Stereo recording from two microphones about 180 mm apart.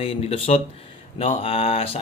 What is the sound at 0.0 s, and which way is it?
A man's voice, 35° left (ahead or behind).